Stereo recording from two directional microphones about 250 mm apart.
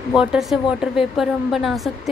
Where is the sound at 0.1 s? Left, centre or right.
Centre.